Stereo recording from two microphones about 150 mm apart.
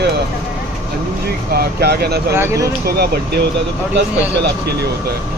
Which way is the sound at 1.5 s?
90° right.